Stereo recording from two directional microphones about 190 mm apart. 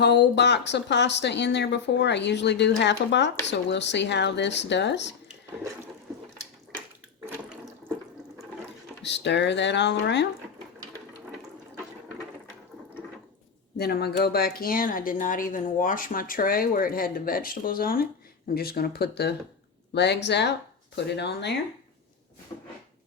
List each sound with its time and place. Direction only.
0.0 s speech: 65° left (ahead or behind)
7.3 s sink: 15° right (ahead or behind)
9.0 s speech: 65° left (ahead or behind)
13.7 s speech: 55° left (ahead or behind)